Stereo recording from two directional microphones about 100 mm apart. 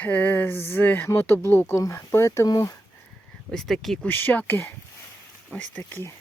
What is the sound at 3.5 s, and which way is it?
Speech, centre (ahead or behind).